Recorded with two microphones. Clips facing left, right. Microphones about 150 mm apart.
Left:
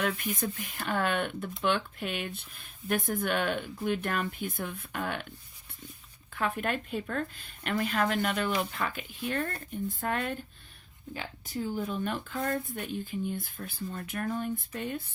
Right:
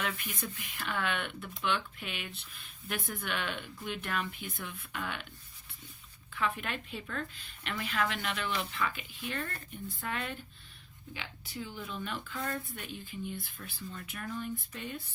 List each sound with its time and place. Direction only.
0.0 s speech: 45° left (ahead or behind)
6.6 s speech: 45° left (ahead or behind)